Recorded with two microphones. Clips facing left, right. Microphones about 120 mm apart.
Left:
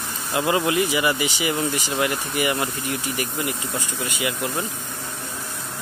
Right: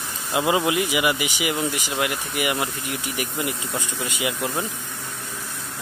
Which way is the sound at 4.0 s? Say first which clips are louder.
Even; 20° right (ahead or behind).